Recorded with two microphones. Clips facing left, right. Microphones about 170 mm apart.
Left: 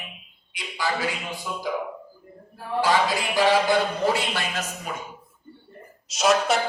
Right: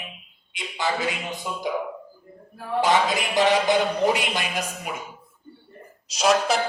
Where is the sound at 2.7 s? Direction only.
20° right (ahead or behind).